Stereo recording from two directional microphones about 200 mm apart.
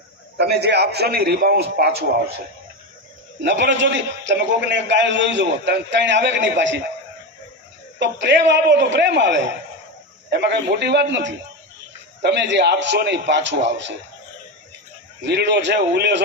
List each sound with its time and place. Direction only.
0.3 s a man's voice: 55° right (ahead or behind)
3.4 s a man's voice: 60° right (ahead or behind)
7.9 s a man's voice: 60° right (ahead or behind)
15.2 s a man's voice: 55° right (ahead or behind)